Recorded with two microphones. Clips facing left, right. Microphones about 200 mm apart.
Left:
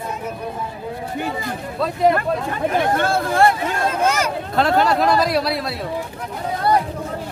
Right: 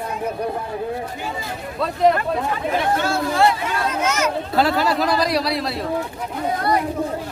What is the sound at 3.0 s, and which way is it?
Speech, 55° left (ahead or behind).